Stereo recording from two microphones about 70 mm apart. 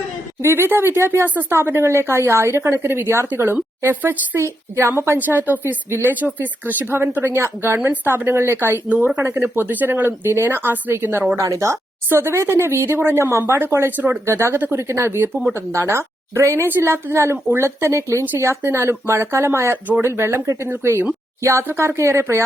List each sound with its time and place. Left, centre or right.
0.4 s speech: right
4.8 s speech: right
11.3 s speech: right
14.3 s speech: right
16.6 s speech: right